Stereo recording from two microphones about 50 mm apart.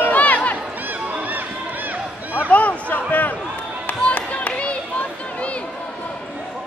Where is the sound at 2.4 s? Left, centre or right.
Left.